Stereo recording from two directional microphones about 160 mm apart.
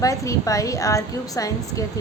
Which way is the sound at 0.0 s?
20° left (ahead or behind).